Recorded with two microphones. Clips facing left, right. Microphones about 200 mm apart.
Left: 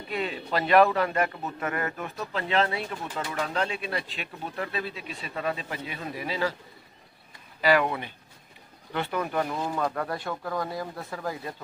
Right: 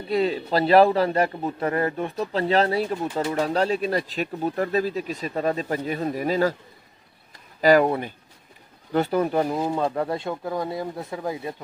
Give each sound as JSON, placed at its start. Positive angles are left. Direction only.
{"t": 0.1, "sound": "a man's voice", "side_deg": -35}
{"t": 7.6, "sound": "a man's voice", "side_deg": -40}